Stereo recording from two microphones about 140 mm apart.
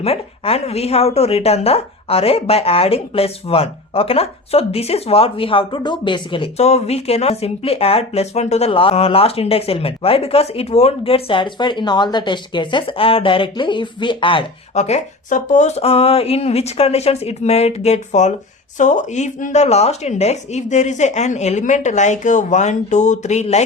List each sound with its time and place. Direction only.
0.0 s speech: 45° left (ahead or behind)
14.8 s speech: 55° left (ahead or behind)